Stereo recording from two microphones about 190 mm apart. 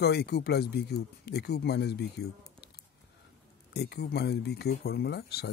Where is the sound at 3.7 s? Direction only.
60° left (ahead or behind).